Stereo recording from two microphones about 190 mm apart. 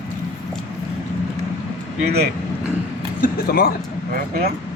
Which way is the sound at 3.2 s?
55° left (ahead or behind).